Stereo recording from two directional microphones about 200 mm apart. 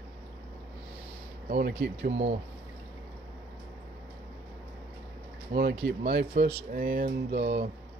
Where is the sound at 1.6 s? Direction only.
55° right (ahead or behind).